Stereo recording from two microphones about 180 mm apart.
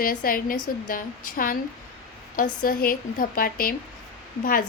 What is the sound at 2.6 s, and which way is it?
A woman's voice, 50° left (ahead or behind).